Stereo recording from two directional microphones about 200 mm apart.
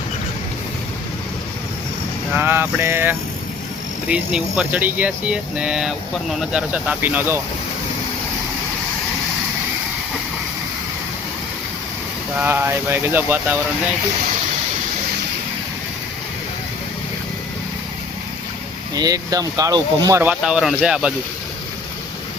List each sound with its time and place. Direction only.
2.3 s speech: 10° right (ahead or behind)
12.4 s speech: 10° right (ahead or behind)
18.9 s speech: 20° right (ahead or behind)
20.4 s speech: 5° right (ahead or behind)